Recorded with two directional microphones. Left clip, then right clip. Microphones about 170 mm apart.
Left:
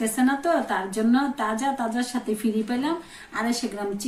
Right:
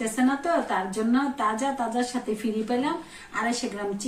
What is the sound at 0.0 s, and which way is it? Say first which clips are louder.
A woman's voice: left 2 dB; 30° left (ahead or behind).